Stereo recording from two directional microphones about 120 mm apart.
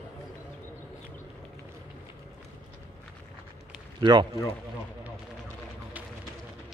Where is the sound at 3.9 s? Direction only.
40° right (ahead or behind).